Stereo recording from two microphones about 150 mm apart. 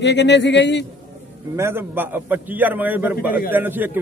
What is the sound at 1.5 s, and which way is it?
A man's voice, 15° right (ahead or behind).